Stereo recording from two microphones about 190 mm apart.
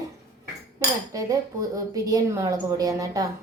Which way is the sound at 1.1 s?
20° right (ahead or behind).